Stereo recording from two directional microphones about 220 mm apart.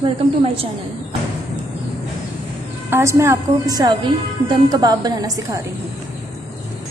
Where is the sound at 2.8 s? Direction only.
10° right (ahead or behind).